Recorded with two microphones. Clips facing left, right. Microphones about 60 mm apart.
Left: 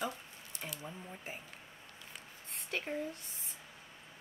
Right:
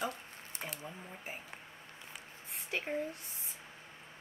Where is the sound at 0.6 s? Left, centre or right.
Right.